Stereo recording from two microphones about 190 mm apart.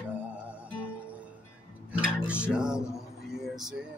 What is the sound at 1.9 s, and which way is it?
Music, 5° right (ahead or behind).